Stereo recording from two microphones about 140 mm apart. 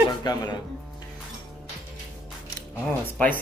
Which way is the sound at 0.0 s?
30° left (ahead or behind).